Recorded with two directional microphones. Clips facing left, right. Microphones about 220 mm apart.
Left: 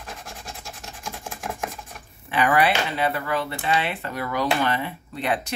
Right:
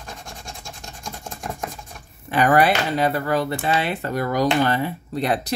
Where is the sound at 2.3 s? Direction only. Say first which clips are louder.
Right 3 dB; 40° right (ahead or behind).